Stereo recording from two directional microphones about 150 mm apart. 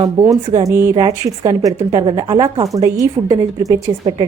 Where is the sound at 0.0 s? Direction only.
20° right (ahead or behind).